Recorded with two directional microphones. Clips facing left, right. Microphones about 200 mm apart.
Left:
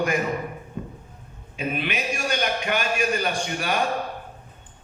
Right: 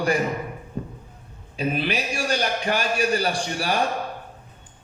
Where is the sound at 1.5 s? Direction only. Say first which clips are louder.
Right 3 dB; 35° right (ahead or behind).